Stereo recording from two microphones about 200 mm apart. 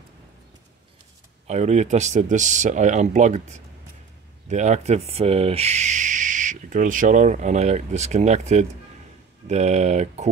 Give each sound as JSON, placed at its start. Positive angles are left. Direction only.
{"t": 1.5, "sound": "speech", "side_deg": -35}